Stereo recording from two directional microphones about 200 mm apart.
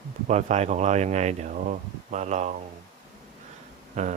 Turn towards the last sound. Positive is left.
turn(degrees=-35)  # may be behind; listen again after turning